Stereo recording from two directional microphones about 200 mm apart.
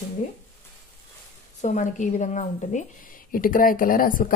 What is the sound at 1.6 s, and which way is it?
A woman's voice, 40° left (ahead or behind).